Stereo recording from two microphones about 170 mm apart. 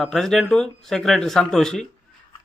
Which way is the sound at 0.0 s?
Centre (ahead or behind).